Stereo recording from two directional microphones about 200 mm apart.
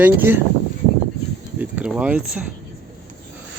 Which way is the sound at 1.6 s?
5° right (ahead or behind).